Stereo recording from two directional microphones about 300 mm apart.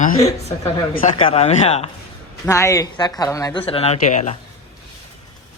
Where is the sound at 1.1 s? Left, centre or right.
Centre.